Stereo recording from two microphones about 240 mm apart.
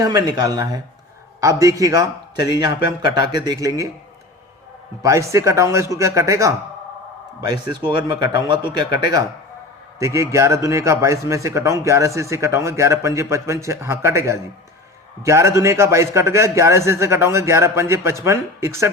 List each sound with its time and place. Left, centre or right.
0.0 s a man's voice: centre
5.0 s a man's voice: centre
7.9 s a man's voice: centre